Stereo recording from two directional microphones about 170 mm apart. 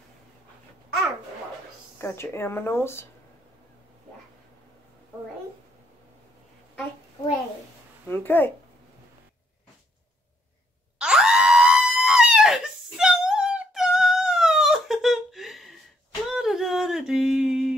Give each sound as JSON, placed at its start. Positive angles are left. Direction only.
{"t": 2.0, "sound": "speech", "side_deg": 15}
{"t": 8.1, "sound": "speech", "side_deg": 10}
{"t": 11.0, "sound": "screaming", "side_deg": -5}
{"t": 16.3, "sound": "a sound", "side_deg": 0}